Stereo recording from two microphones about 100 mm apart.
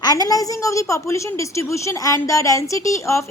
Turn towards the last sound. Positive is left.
turn(degrees=30)  # may be behind; listen again after turning